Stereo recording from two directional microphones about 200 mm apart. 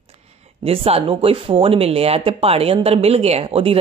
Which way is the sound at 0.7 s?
30° right (ahead or behind).